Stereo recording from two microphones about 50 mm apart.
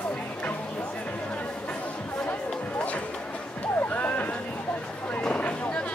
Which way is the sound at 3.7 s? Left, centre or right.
Left.